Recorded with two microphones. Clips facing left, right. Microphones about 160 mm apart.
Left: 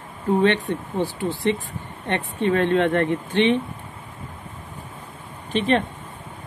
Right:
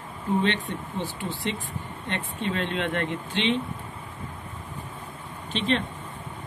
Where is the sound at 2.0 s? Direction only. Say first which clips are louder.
Left 8 dB; 60° left (ahead or behind).